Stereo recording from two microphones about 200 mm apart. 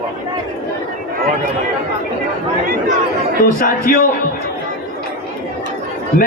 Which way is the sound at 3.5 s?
45° left (ahead or behind).